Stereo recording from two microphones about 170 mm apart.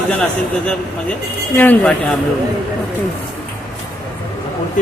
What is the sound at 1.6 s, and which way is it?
Speech, 10° left (ahead or behind).